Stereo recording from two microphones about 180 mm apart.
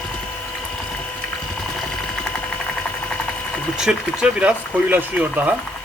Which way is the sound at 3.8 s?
5° right (ahead or behind).